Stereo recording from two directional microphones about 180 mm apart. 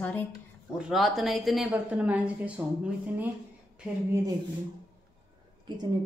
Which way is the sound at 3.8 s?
5° right (ahead or behind).